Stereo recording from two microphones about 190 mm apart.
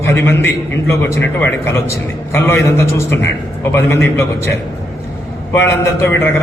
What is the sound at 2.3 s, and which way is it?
A man's voice, 15° left (ahead or behind).